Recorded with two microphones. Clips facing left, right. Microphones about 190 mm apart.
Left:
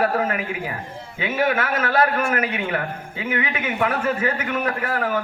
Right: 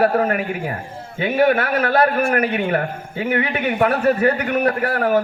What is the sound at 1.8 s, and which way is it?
Speech, 40° right (ahead or behind).